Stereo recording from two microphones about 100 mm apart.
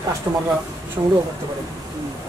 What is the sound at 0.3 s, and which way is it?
Speech, 25° right (ahead or behind).